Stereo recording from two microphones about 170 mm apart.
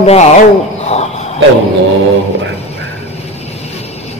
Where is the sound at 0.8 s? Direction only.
40° left (ahead or behind).